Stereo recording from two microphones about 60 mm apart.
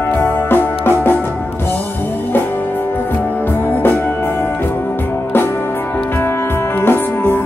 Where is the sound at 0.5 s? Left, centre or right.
Left.